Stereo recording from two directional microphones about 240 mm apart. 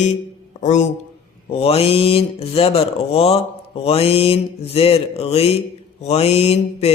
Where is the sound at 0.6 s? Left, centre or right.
Left.